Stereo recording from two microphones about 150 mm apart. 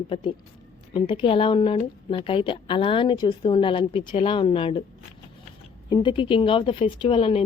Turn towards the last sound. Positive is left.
turn(degrees=40)  # may be behind; listen again after turning